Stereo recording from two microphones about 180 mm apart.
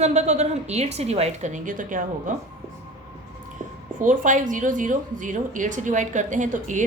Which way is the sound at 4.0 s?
45° right (ahead or behind).